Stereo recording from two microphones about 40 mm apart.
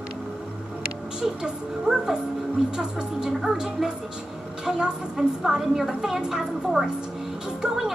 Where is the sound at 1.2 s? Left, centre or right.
Centre.